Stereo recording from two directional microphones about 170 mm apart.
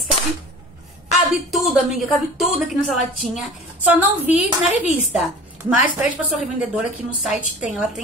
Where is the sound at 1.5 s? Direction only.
Centre (ahead or behind).